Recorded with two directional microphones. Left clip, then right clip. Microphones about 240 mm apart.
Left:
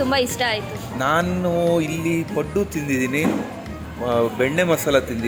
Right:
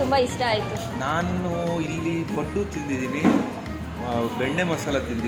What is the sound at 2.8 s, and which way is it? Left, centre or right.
A man's voice, left.